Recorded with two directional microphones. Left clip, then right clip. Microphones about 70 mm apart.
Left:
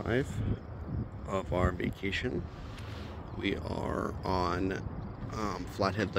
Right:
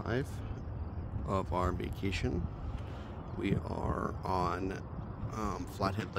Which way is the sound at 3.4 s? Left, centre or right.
Right.